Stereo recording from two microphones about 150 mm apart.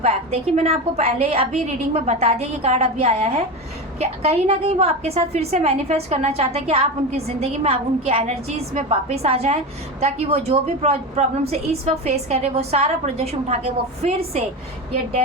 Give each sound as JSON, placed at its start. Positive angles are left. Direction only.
{"t": 0.0, "sound": "a woman's voice", "side_deg": -40}